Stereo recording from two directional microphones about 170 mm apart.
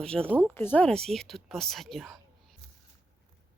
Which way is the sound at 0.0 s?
5° left (ahead or behind).